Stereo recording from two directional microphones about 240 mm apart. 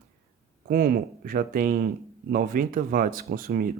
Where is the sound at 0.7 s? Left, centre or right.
Right.